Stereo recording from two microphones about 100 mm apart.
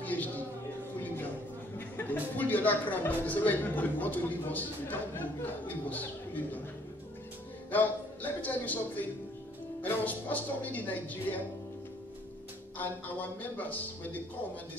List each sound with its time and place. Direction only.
0.0 s music: 15° left (ahead or behind)
2.0 s speech: 15° left (ahead or behind)
7.7 s speech: 15° left (ahead or behind)
12.7 s speech: 15° left (ahead or behind)